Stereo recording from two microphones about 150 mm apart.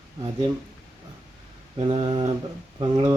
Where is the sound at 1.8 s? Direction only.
35° right (ahead or behind).